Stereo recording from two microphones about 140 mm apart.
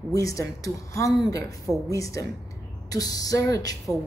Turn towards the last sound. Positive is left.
turn(degrees=25)  # may be behind; listen again after turning